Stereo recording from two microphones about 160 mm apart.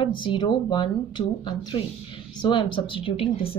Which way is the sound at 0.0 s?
30° left (ahead or behind).